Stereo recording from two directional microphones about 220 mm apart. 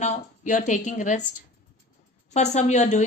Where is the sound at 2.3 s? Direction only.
30° left (ahead or behind).